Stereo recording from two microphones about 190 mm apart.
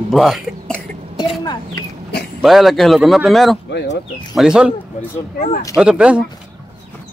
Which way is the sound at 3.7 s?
65° left (ahead or behind).